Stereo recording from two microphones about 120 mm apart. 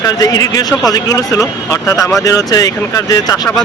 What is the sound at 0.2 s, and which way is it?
Speech, 30° left (ahead or behind).